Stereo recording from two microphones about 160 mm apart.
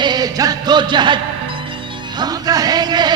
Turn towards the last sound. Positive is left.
turn(degrees=-25)  # may be behind; listen again after turning